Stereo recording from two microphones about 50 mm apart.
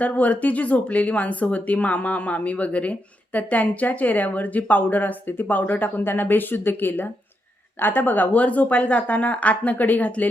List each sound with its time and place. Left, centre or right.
0.0 s speech: left